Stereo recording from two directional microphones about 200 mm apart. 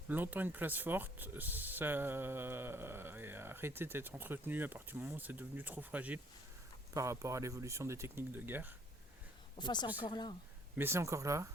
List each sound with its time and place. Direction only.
0.1 s speech: 10° right (ahead or behind)
9.6 s speech: 20° left (ahead or behind)
10.8 s speech: 10° right (ahead or behind)